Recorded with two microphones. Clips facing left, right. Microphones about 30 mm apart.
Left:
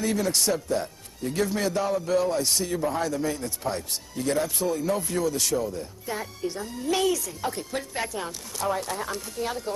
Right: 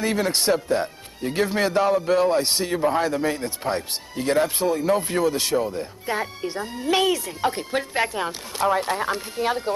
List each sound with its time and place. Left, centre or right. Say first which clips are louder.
0.0 s a man's voice: right 3 dB; right